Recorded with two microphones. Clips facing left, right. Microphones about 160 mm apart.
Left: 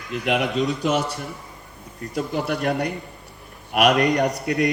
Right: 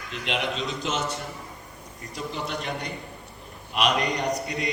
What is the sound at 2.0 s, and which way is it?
A man's voice, 60° left (ahead or behind).